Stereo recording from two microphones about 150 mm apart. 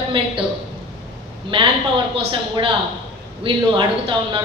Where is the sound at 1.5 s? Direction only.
35° right (ahead or behind).